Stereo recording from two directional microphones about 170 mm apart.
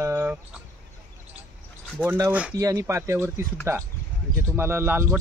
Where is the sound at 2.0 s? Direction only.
20° right (ahead or behind).